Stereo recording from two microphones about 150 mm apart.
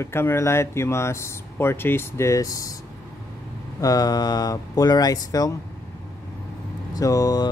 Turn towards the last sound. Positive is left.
turn(degrees=25)  # may be behind; listen again after turning